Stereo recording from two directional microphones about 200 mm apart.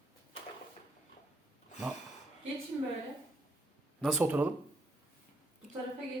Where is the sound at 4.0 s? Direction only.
5° right (ahead or behind).